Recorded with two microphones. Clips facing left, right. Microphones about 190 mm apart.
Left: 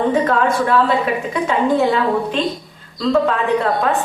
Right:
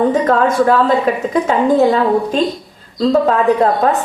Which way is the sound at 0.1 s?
40° right (ahead or behind).